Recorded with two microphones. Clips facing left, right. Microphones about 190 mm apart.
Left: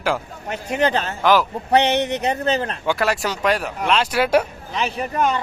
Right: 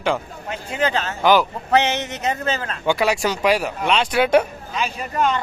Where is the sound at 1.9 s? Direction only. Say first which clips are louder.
Left 7 dB; 60° left (ahead or behind).